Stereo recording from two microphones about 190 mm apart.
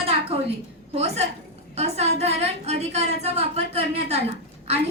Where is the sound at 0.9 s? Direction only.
35° right (ahead or behind).